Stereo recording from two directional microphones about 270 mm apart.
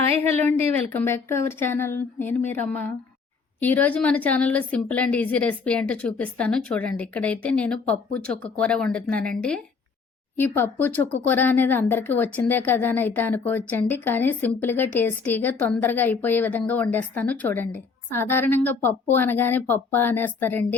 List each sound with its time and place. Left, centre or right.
0.1 s a woman's voice: right
0.8 s a woman's voice: centre